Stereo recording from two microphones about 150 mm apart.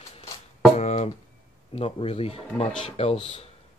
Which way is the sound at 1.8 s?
40° left (ahead or behind).